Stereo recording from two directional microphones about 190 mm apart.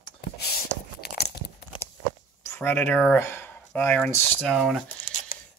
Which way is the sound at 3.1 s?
10° left (ahead or behind).